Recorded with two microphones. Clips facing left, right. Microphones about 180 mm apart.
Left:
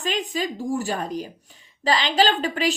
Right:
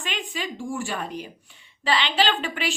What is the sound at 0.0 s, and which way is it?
A woman's voice, 40° left (ahead or behind).